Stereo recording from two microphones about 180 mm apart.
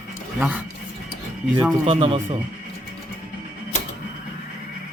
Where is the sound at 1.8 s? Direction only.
35° right (ahead or behind).